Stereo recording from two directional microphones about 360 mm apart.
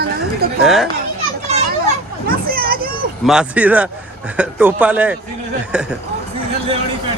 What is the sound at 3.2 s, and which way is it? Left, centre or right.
Speech, centre.